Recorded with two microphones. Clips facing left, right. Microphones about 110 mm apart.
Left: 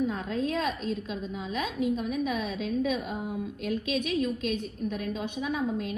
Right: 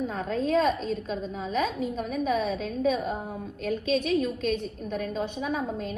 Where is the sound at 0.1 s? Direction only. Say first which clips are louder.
Right 4 dB; 40° right (ahead or behind).